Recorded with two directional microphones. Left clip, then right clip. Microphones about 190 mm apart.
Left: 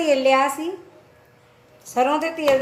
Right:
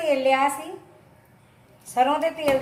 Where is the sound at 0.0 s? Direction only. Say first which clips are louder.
Left 3 dB; 55° left (ahead or behind).